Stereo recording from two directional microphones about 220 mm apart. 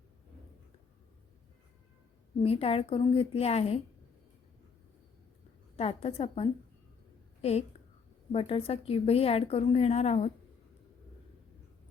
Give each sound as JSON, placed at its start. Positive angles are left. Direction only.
{"t": 2.4, "sound": "a woman's voice", "side_deg": 25}
{"t": 5.7, "sound": "a woman's voice", "side_deg": 25}
{"t": 8.3, "sound": "a woman's voice", "side_deg": 25}